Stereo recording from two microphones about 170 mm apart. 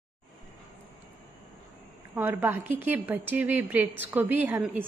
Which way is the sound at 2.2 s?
10° right (ahead or behind).